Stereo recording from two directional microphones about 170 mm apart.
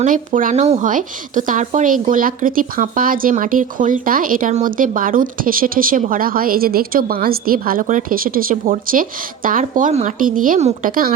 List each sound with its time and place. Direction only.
0.0 s speech: 50° right (ahead or behind)